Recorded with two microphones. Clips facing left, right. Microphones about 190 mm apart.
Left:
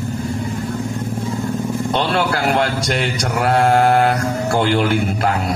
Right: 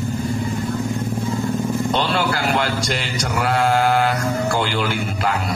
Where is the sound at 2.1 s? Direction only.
60° left (ahead or behind).